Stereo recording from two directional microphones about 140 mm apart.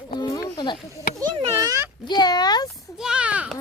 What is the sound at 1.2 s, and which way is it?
Speech, 25° right (ahead or behind).